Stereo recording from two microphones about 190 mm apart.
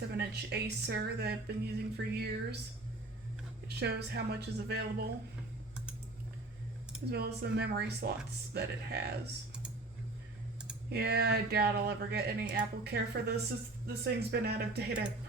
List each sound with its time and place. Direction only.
0.1 s speech: 55° right (ahead or behind)
3.8 s speech: 60° right (ahead or behind)
7.1 s speech: 60° right (ahead or behind)
10.8 s speech: 55° right (ahead or behind)